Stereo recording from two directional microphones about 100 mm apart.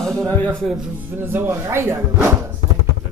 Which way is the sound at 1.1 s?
20° right (ahead or behind).